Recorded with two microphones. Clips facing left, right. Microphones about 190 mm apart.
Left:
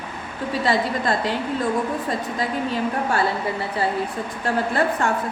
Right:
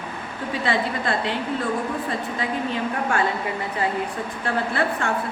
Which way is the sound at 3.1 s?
35° left (ahead or behind).